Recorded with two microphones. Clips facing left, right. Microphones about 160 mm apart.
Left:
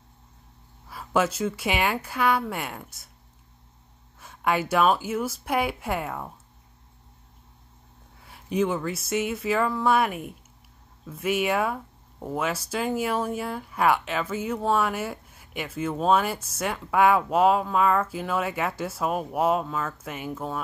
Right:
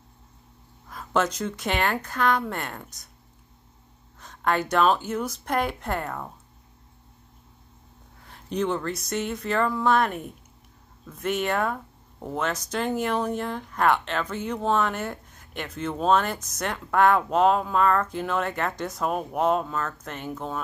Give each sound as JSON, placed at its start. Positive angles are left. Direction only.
{"t": 0.8, "sound": "speech", "side_deg": 5}
{"t": 4.2, "sound": "speech", "side_deg": 10}
{"t": 8.2, "sound": "speech", "side_deg": 5}